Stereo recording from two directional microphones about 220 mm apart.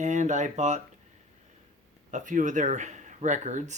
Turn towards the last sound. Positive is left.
turn(degrees=-30)  # may be behind; listen again after turning